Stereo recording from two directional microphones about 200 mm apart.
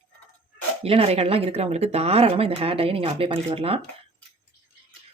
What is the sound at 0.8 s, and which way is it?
Speech, 30° right (ahead or behind).